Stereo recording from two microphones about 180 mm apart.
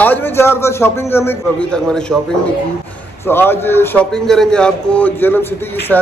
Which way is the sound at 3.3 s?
10° left (ahead or behind).